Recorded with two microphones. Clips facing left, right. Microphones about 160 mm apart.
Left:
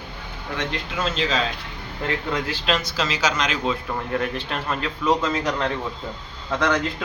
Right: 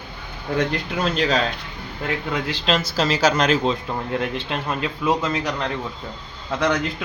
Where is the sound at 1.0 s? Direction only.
50° right (ahead or behind).